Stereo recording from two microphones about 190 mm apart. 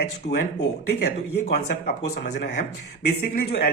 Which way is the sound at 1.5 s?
60° left (ahead or behind).